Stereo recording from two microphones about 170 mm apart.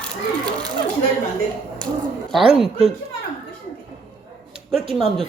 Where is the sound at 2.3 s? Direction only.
Centre (ahead or behind).